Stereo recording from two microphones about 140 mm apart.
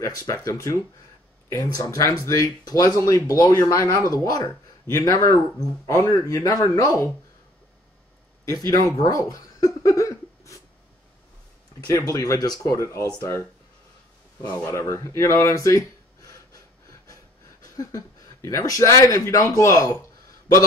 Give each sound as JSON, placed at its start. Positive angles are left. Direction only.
{"t": 0.0, "sound": "speech", "side_deg": 20}
{"t": 8.5, "sound": "speech", "side_deg": 25}
{"t": 9.0, "sound": "a sound", "side_deg": 25}
{"t": 11.9, "sound": "speech", "side_deg": 25}
{"t": 14.5, "sound": "speech", "side_deg": 20}
{"t": 17.7, "sound": "speech", "side_deg": 25}